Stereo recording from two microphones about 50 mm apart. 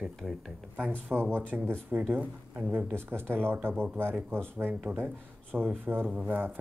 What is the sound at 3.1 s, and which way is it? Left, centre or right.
Speech, right.